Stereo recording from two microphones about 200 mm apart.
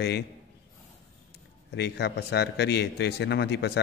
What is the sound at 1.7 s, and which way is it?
A man's voice, 55° left (ahead or behind).